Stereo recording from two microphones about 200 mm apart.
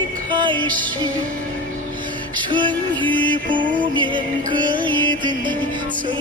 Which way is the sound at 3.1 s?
25° right (ahead or behind).